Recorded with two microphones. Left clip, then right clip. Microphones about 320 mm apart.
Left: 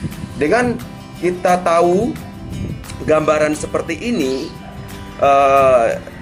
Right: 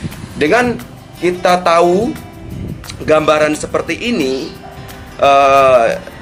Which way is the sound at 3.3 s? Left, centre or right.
Centre.